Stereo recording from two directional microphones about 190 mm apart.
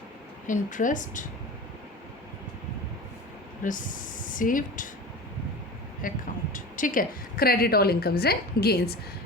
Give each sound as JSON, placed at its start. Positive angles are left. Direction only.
{"t": 0.4, "sound": "speech", "side_deg": 40}
{"t": 3.6, "sound": "speech", "side_deg": 45}
{"t": 6.0, "sound": "speech", "side_deg": 45}